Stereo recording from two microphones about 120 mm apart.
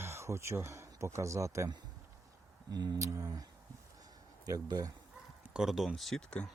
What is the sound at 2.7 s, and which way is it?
Speech, 35° right (ahead or behind).